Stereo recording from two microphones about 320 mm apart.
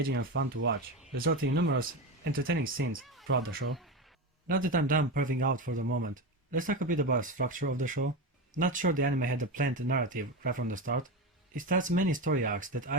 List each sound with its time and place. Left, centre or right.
0.0 s speech: right
3.0 s a sound: centre
3.2 s speech: right